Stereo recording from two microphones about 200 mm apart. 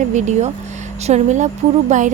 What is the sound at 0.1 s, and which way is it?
Speech, 35° right (ahead or behind).